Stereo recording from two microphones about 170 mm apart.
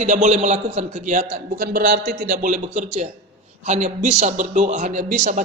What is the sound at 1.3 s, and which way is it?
A man's voice, 60° right (ahead or behind).